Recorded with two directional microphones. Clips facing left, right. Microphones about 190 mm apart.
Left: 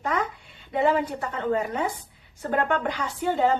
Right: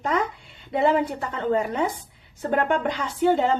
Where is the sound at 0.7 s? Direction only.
30° right (ahead or behind).